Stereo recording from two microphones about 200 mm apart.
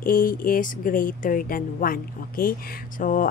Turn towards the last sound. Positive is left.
turn(degrees=40)  # may be behind; listen again after turning